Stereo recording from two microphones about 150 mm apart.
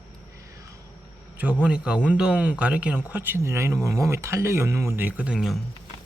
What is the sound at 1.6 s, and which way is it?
Speech, 5° right (ahead or behind).